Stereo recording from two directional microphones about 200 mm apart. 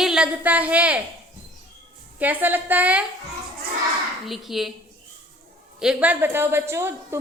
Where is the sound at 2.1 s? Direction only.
10° right (ahead or behind).